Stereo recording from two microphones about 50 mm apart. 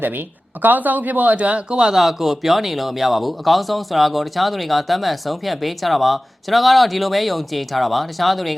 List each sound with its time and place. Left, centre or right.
0.6 s speech: right; by 2.0 s centre
2.0 s speech: centre